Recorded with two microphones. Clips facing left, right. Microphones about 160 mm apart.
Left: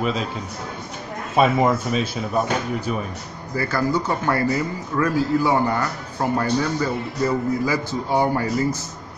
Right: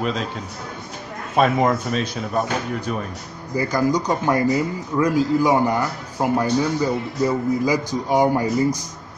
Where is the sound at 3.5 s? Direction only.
15° right (ahead or behind).